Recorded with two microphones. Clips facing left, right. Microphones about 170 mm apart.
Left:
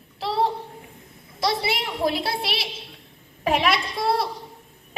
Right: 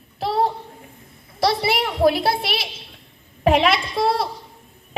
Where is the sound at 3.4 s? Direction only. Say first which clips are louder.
Right 5 dB; 55° right (ahead or behind).